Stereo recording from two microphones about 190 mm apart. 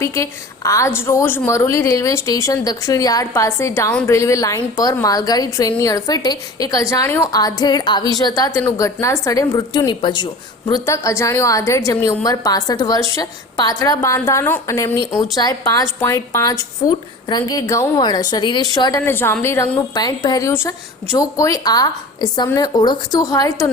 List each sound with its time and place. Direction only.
0.0 s a woman's voice: 15° left (ahead or behind)